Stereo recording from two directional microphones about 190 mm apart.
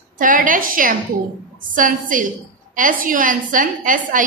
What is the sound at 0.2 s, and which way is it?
A woman's voice, 45° right (ahead or behind).